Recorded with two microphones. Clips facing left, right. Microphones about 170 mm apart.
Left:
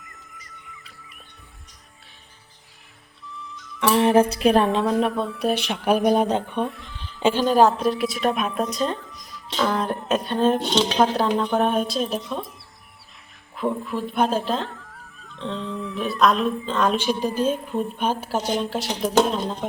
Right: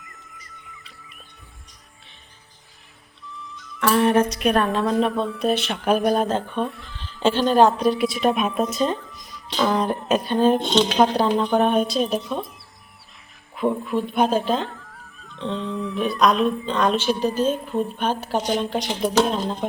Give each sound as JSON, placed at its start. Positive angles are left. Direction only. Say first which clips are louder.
{"t": 3.9, "sound": "speech", "louder": "left 1 dB", "side_deg": 30}
{"t": 4.9, "sound": "a woman's voice", "louder": "right 1 dB", "side_deg": 5}
{"t": 13.6, "sound": "speech", "louder": "right 3 dB", "side_deg": 0}